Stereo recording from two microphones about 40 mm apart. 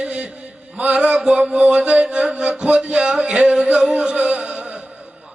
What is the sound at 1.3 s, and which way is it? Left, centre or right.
Music, right.